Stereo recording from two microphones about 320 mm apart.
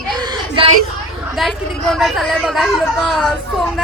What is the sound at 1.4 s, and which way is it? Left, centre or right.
Speech, centre.